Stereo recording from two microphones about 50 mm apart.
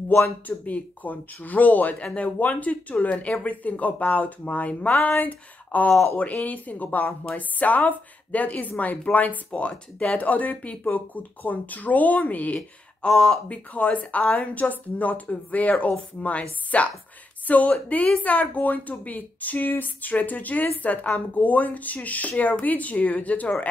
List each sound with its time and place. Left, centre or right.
0.5 s speech: left
12.5 s speech: centre
13.5 s speech: left